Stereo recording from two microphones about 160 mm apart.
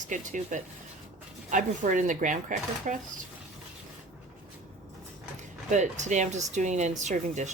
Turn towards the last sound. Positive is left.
turn(degrees=-50)  # may be behind; listen again after turning